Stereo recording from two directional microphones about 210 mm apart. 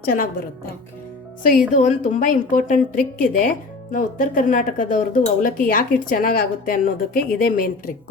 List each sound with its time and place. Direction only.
1.4 s a woman's voice: 40° left (ahead or behind)